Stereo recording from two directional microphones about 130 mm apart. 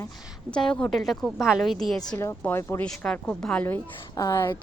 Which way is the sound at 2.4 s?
15° left (ahead or behind).